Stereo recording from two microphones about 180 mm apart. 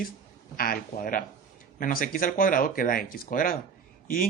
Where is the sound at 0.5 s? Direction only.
55° left (ahead or behind).